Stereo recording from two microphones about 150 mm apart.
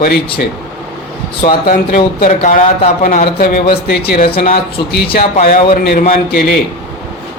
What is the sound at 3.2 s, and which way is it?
Speech, 90° left.